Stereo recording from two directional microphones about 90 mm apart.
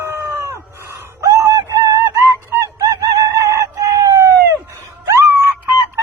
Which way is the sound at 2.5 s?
40° right (ahead or behind).